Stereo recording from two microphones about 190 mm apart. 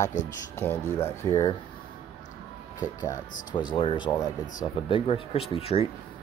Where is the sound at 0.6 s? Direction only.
10° left (ahead or behind).